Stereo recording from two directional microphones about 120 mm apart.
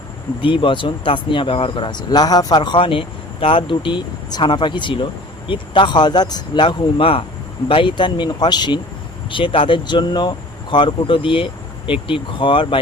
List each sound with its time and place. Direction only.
0.4 s speech: 45° left (ahead or behind)